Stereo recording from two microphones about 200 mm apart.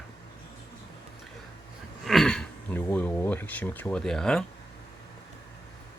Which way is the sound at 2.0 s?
Centre (ahead or behind).